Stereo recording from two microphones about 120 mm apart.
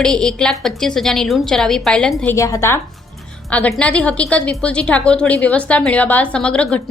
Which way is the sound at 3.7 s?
10° left (ahead or behind).